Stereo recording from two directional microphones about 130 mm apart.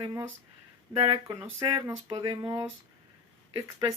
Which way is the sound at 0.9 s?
40° right (ahead or behind).